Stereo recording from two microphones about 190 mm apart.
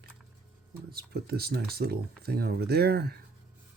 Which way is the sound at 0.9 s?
55° right (ahead or behind).